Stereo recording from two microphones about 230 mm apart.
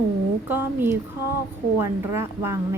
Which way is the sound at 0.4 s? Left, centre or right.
Centre.